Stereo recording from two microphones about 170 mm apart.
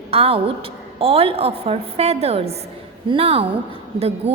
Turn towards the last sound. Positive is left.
turn(degrees=-40)  # may be behind; listen again after turning